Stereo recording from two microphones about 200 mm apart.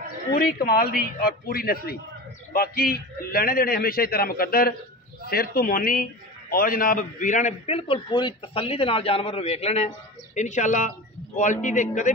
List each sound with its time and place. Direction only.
0.3 s a man's voice: 50° left (ahead or behind)